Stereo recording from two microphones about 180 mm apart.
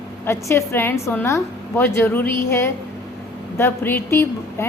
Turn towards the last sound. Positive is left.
turn(degrees=15)  # may be behind; listen again after turning